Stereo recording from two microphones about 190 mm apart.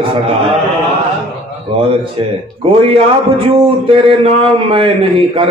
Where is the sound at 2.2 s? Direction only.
30° right (ahead or behind).